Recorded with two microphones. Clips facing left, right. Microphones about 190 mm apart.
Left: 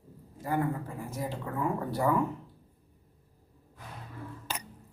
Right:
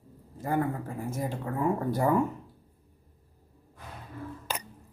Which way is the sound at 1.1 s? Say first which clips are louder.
Right 3 dB; 50° right (ahead or behind).